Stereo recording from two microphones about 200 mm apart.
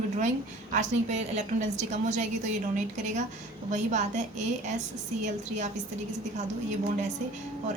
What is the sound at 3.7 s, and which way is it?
Speech, 35° right (ahead or behind).